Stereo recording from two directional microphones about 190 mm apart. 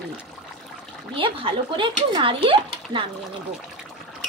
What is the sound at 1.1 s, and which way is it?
Speech, 30° right (ahead or behind).